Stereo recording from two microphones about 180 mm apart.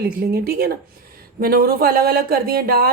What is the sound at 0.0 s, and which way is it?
Speech, 60° right (ahead or behind).